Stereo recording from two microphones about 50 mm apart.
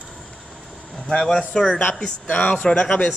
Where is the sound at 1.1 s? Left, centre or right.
Centre.